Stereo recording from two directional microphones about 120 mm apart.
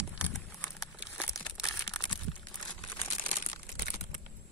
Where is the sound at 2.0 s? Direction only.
25° left (ahead or behind).